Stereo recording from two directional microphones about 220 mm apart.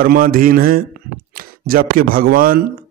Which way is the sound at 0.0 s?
40° right (ahead or behind).